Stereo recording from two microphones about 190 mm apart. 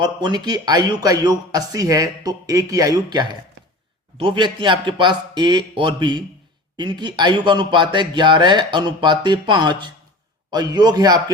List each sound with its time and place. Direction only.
0.0 s a man's voice: 25° right (ahead or behind)